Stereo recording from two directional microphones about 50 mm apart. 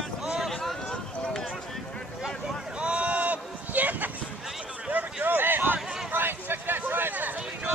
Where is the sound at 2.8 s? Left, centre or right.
Right.